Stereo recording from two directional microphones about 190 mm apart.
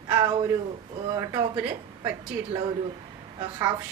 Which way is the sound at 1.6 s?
10° right (ahead or behind).